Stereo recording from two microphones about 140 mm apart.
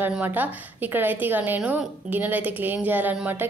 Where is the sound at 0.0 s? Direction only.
15° right (ahead or behind).